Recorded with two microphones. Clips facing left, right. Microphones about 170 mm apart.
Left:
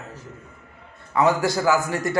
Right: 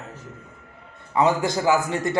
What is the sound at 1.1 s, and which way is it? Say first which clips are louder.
Speech: left 1 dB; 20° right (ahead or behind).